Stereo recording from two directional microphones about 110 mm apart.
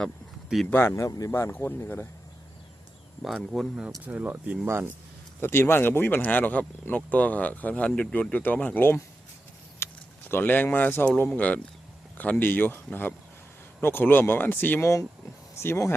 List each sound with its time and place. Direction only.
0.7 s speech: 20° left (ahead or behind)
3.2 s speech: centre (ahead or behind)
4.0 s speech: 15° right (ahead or behind)
5.4 s speech: 20° left (ahead or behind)